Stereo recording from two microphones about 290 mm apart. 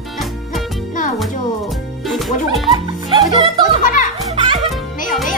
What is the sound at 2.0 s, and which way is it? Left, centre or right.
Music, centre.